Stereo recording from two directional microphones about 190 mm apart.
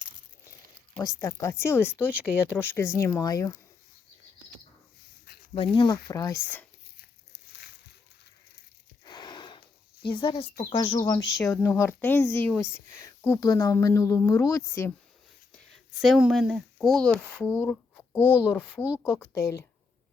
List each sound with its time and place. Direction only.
0.9 s speech: 15° left (ahead or behind)
5.5 s speech: 25° left (ahead or behind)
9.0 s a sound: 25° left (ahead or behind)
10.0 s speech: 25° left (ahead or behind)
15.5 s speech: centre (ahead or behind)